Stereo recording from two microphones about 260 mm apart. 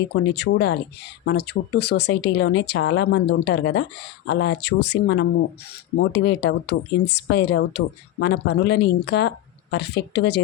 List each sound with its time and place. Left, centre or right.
0.1 s speech: left